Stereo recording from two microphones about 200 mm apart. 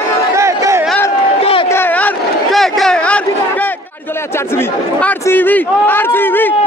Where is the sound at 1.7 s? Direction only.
10° left (ahead or behind).